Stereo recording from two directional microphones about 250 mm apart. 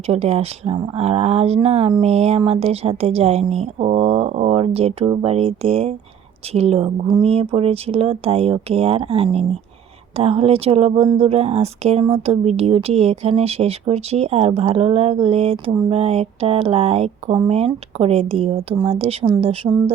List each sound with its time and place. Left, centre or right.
0.1 s speech: right